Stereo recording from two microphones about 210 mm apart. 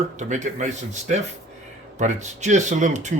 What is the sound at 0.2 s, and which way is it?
Speech, 35° right (ahead or behind).